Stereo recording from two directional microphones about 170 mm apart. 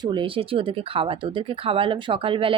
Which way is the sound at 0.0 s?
30° right (ahead or behind).